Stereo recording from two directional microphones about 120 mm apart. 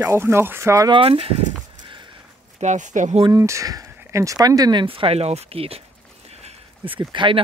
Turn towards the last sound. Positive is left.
turn(degrees=-40)  # may be behind; listen again after turning